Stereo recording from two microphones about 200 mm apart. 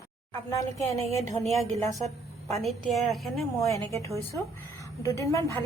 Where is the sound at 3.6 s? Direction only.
15° left (ahead or behind).